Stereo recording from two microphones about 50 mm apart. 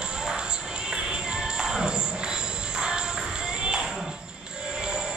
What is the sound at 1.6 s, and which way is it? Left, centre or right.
Music, centre.